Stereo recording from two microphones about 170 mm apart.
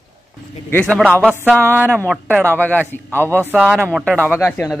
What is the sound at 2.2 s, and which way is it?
Speech, 10° right (ahead or behind).